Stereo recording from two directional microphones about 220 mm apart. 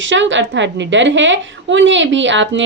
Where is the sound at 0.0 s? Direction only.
60° right (ahead or behind).